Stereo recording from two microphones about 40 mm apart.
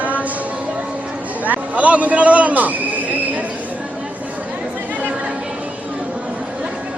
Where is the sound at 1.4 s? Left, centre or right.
Right.